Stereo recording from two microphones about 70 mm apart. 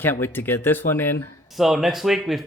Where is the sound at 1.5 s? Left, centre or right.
Centre.